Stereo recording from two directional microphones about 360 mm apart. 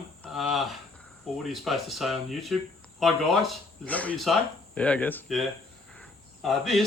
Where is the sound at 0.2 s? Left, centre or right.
Centre.